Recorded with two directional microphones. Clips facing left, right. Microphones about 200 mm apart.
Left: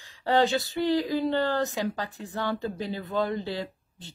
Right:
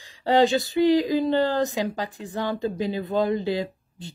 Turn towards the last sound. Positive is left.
turn(degrees=-15)  # may be behind; listen again after turning